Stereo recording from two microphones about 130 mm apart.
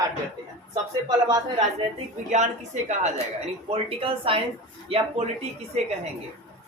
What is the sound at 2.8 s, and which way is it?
Speech, 65° right (ahead or behind).